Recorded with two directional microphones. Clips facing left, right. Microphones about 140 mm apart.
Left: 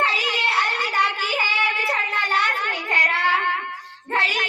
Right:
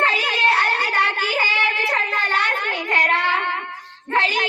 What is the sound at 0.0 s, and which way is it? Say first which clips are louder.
Child singing: right 3 dB; 50° right (ahead or behind).